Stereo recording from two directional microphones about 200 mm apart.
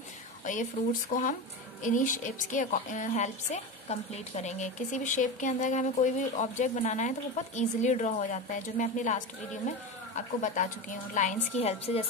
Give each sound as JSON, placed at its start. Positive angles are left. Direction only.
{"t": 0.5, "sound": "a woman's voice", "side_deg": 40}